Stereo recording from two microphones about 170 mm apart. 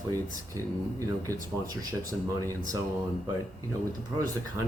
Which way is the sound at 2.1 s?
20° right (ahead or behind).